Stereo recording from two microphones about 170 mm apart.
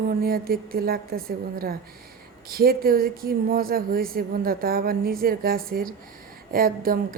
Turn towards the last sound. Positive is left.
turn(degrees=-60)  # may be behind; listen again after turning